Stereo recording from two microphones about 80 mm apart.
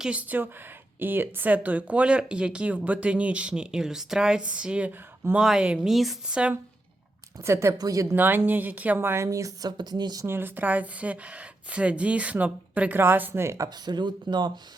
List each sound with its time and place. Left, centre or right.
0.0 s speech: centre
7.4 s a woman's voice: right
7.8 s speech: right
8.1 s speech: right
9.0 s a woman's voice: right
9.6 s speech: right
10.2 s speech: right
13.8 s speech: right